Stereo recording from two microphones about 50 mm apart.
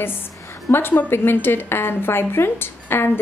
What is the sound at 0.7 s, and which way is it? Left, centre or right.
A woman's voice, left.